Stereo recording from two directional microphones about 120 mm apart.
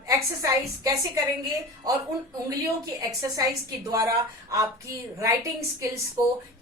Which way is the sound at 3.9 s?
25° right (ahead or behind).